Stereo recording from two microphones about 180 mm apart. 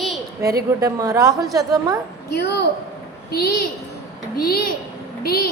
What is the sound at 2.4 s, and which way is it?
Speech, 65° left (ahead or behind).